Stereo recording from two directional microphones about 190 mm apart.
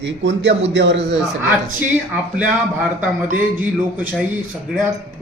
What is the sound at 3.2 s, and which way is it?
Speech, 45° right (ahead or behind).